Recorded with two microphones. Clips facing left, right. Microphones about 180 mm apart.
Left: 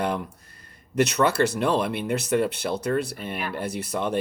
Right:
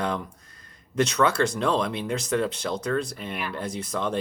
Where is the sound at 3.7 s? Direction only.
65° left (ahead or behind).